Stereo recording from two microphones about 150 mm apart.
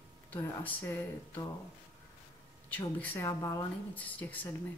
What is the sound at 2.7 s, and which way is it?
Speech, 10° left (ahead or behind).